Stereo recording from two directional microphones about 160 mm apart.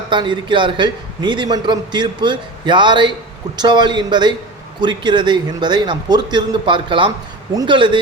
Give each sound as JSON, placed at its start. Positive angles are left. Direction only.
{"t": 0.1, "sound": "a man's voice", "side_deg": -30}